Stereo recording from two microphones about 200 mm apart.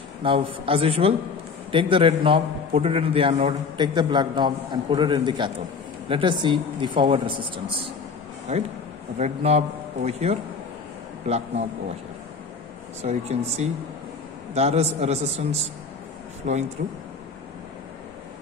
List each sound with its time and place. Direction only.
0.2 s a man's voice: 25° right (ahead or behind)
9.2 s a man's voice: 35° right (ahead or behind)
13.0 s a man's voice: 35° right (ahead or behind)
16.8 s speech: 45° right (ahead or behind)